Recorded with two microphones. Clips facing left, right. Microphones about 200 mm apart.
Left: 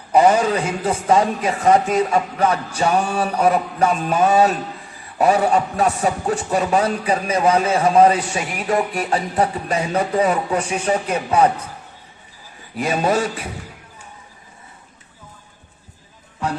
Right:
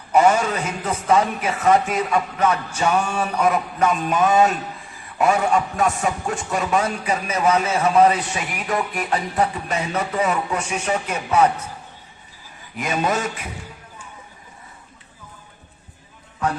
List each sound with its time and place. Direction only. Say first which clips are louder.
0.1 s a man's voice: left 2 dB; 35° left (ahead or behind)
12.7 s a man's voice: left 4 dB; 35° left (ahead or behind)